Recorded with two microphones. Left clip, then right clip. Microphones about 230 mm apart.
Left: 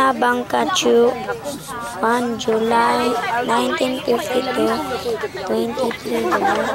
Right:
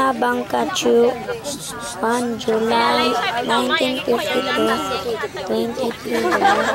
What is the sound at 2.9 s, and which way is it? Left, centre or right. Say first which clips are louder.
Speech: right 1 dB; right.